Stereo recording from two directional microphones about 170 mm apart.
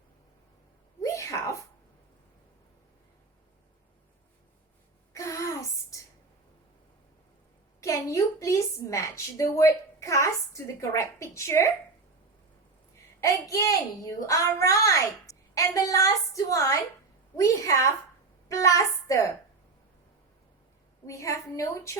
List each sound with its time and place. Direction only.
1.0 s sneeze: 15° left (ahead or behind)
5.1 s a sound: 20° left (ahead or behind)
7.8 s a woman's voice: 20° left (ahead or behind)
13.2 s a child's voice: 20° left (ahead or behind)
21.1 s a woman's voice: 20° left (ahead or behind)